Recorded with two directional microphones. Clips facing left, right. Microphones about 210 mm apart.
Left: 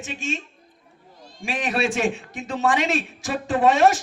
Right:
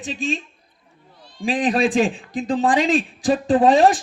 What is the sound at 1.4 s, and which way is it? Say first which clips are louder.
A man's voice: right 6 dB; 35° right (ahead or behind).